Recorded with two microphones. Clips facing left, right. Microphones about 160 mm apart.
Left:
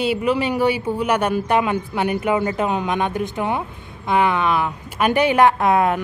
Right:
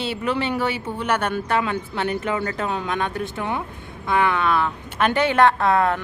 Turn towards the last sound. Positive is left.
turn(degrees=15)  # may be behind; listen again after turning